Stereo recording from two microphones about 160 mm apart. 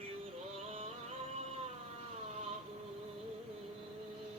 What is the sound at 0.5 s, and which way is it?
Music, 40° right (ahead or behind).